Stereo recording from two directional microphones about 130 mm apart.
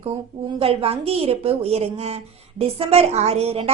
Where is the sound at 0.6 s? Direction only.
50° right (ahead or behind).